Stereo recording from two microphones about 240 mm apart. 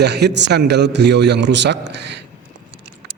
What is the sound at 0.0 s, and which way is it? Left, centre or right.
A man's voice, right.